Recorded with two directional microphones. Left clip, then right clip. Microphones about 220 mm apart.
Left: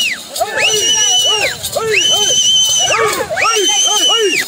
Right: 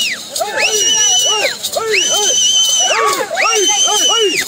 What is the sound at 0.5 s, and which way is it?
Screaming, 10° left (ahead or behind).